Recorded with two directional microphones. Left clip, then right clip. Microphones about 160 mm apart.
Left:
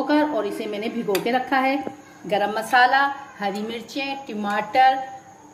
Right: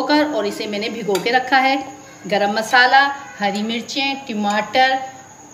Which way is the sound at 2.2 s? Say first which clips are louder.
Right 4 dB; 55° left (ahead or behind).